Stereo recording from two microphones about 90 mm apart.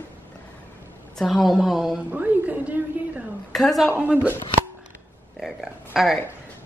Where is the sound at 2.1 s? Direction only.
20° right (ahead or behind).